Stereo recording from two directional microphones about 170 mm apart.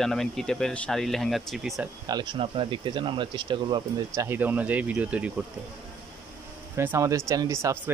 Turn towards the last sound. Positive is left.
turn(degrees=-15)  # may be behind; listen again after turning